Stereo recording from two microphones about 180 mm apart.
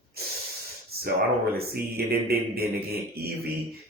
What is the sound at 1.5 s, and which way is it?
Speech, 60° right (ahead or behind).